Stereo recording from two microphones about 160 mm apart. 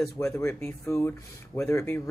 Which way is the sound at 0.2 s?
15° left (ahead or behind).